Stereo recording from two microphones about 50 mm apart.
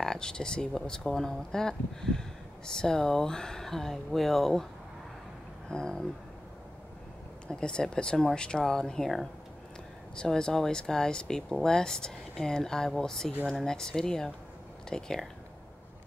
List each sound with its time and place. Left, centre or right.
0.0 s speech: centre
5.7 s speech: centre
7.4 s speech: centre